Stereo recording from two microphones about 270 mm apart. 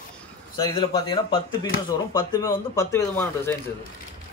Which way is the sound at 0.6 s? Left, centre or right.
Centre.